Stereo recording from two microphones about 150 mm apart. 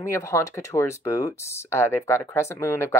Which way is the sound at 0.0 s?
20° left (ahead or behind).